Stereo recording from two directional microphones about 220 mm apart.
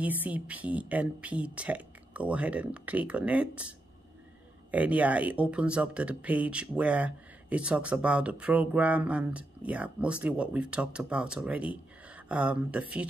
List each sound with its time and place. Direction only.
0.0 s speech: 5° right (ahead or behind)